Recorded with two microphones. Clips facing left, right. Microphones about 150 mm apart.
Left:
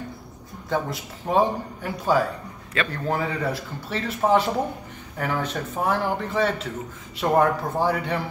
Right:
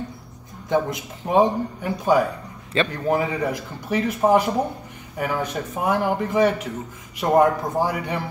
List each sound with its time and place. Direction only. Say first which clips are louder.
0.7 s a man's voice: right 4 dB; 20° right (ahead or behind)
3.2 s a man's voice: right 3 dB; 15° right (ahead or behind)